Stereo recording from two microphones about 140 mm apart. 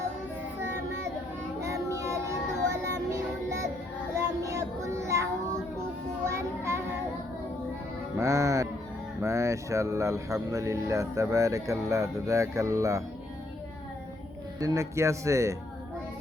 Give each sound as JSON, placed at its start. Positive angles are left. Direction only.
{"t": 1.6, "sound": "child singing", "side_deg": -20}
{"t": 3.1, "sound": "music", "side_deg": -20}
{"t": 4.1, "sound": "child singing", "side_deg": -20}
{"t": 8.2, "sound": "music", "side_deg": -25}
{"t": 9.2, "sound": "speech", "side_deg": -20}
{"t": 14.6, "sound": "speech", "side_deg": -20}